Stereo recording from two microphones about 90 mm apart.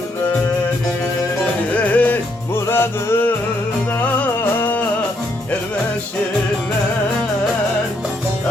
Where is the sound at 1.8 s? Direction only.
20° left (ahead or behind).